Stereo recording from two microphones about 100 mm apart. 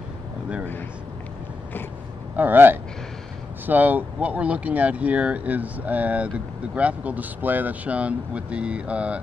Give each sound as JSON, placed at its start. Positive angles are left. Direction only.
{"t": 2.3, "sound": "speech", "side_deg": -20}